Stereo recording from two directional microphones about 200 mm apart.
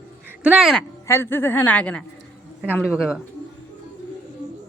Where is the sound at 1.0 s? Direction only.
15° left (ahead or behind).